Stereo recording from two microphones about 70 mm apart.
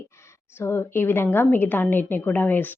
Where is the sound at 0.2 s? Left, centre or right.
Left.